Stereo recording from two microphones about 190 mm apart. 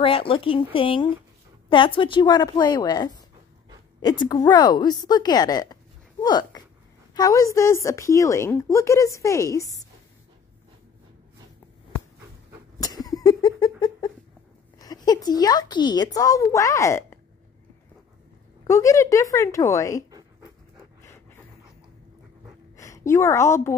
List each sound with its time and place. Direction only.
0.0 s a woman's voice: 30° left (ahead or behind)
12.8 s a sound: 20° left (ahead or behind)
14.8 s speech: 20° left (ahead or behind)
18.6 s speech: 15° left (ahead or behind)
22.8 s a woman's voice: 15° left (ahead or behind)